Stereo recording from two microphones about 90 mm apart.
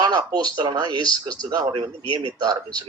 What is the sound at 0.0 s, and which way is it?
A man's voice, 50° right (ahead or behind).